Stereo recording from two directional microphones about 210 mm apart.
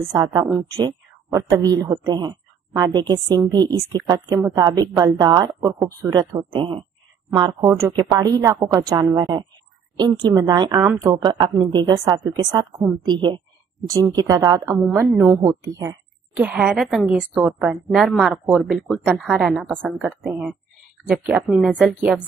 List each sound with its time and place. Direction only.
0.1 s a woman's voice: 20° right (ahead or behind)
16.3 s a woman's voice: 5° right (ahead or behind)